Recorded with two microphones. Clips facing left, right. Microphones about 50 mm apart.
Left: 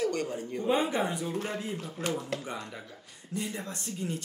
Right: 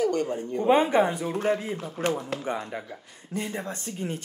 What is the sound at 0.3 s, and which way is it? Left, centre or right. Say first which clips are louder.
Speech: right 7 dB; right.